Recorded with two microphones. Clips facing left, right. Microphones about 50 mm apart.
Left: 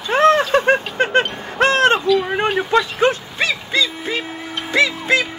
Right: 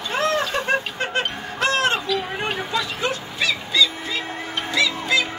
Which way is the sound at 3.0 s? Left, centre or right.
Left.